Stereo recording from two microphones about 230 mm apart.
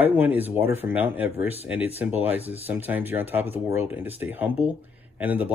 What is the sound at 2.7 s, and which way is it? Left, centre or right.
Speech, centre.